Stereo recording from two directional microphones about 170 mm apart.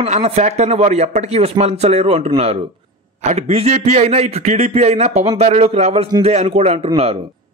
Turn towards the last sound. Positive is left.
turn(degrees=-35)  # may be behind; listen again after turning